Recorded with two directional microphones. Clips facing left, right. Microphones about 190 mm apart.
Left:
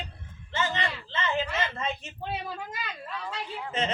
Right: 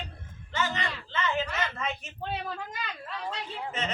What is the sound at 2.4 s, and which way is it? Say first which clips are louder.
Speech: even; 5° left (ahead or behind).